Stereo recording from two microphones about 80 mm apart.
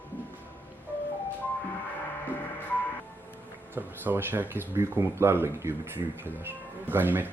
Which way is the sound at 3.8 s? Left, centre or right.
Right.